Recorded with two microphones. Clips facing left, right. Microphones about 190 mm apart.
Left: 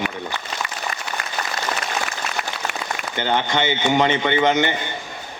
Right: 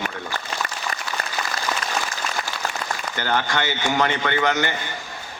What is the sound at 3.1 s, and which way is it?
A man's voice, 20° left (ahead or behind).